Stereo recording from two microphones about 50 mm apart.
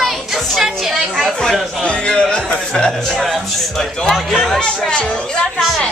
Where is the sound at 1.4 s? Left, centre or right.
Centre.